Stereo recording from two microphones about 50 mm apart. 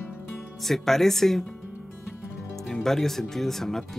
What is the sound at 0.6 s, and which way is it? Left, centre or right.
Speech, centre.